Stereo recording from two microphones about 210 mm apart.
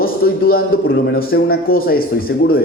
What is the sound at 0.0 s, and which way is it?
A man's voice, 45° left (ahead or behind).